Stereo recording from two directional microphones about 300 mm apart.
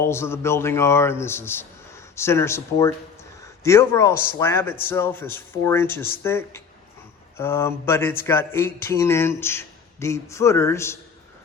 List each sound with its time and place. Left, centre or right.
0.0 s a man's voice: centre